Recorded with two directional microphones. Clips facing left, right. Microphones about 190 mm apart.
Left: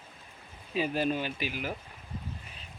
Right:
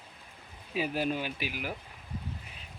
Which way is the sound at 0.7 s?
10° right (ahead or behind).